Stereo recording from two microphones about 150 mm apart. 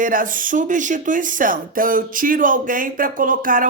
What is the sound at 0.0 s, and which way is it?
Speech, 65° right (ahead or behind).